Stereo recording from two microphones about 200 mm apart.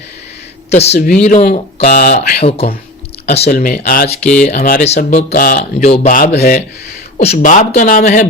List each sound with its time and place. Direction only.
0.7 s a man's voice: 30° left (ahead or behind)
0.9 s speech: 50° left (ahead or behind)
1.2 s speech: 35° left (ahead or behind)
2.4 s speech: 30° left (ahead or behind)
3.5 s speech: 50° left (ahead or behind)
4.8 s speech: 35° left (ahead or behind)
7.2 s speech: 35° left (ahead or behind)